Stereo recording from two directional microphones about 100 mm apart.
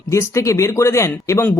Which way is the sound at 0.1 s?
30° left (ahead or behind).